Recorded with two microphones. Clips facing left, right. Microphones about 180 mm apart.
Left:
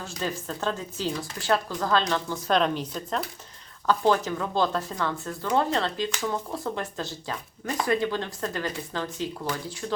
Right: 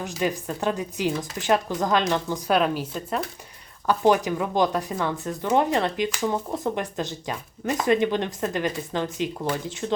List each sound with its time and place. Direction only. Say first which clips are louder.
0.0 s speech: right 5 dB; 15° right (ahead or behind)